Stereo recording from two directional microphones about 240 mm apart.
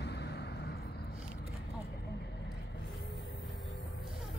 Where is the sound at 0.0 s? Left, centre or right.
Left.